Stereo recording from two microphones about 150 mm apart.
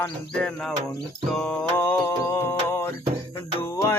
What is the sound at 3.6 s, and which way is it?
Music, 15° left (ahead or behind).